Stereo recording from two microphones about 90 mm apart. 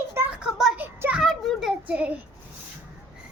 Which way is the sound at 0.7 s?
20° right (ahead or behind).